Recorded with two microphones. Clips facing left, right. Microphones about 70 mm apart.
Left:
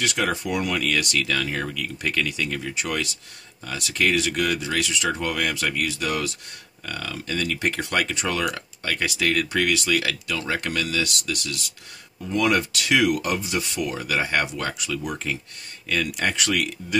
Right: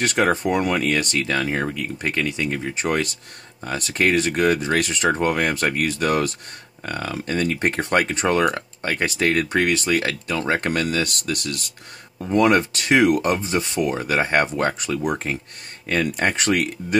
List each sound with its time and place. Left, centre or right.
0.0 s speech: right